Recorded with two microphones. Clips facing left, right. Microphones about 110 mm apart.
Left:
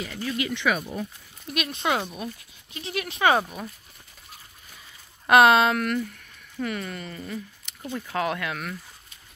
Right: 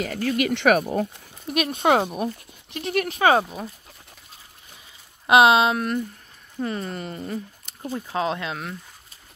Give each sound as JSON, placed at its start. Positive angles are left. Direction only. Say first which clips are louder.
{"t": 0.0, "sound": "speech", "louder": "right 6 dB", "side_deg": -65}
{"t": 1.5, "sound": "speech", "louder": "right 7 dB", "side_deg": -45}
{"t": 3.2, "sound": "speech", "louder": "right 2 dB", "side_deg": -25}
{"t": 5.2, "sound": "speech", "louder": "right 1 dB", "side_deg": -20}
{"t": 8.0, "sound": "speech", "louder": "right 1 dB", "side_deg": -20}